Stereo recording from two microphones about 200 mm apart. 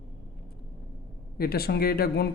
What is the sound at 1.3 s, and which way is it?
Speech, 50° left (ahead or behind).